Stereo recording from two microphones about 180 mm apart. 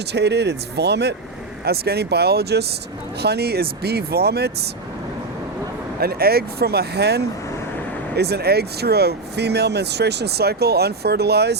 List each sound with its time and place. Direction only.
0.1 s speech: 70° right (ahead or behind)
6.0 s speech: 60° right (ahead or behind)